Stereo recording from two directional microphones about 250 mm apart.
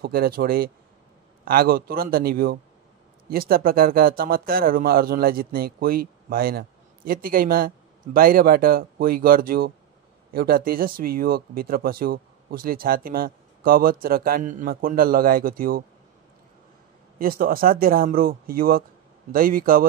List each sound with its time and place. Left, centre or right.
0.0 s speech: right
17.2 s speech: right